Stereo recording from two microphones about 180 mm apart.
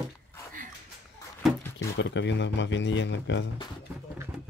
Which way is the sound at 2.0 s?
80° left.